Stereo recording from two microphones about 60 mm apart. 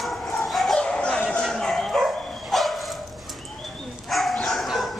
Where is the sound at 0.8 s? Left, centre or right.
Centre.